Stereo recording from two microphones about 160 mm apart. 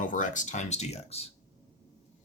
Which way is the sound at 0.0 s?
55° left (ahead or behind).